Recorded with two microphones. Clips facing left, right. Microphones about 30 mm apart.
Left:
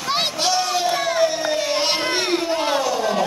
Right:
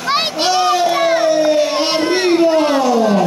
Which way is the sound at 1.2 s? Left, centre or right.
Centre.